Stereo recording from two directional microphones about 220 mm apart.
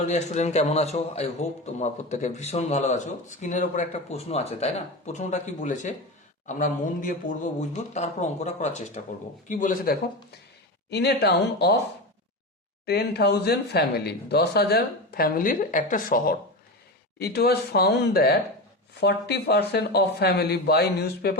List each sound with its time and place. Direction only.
0.1 s a man's voice: 30° left (ahead or behind); by 11.8 s 50° left (ahead or behind)
12.8 s speech: 45° left (ahead or behind)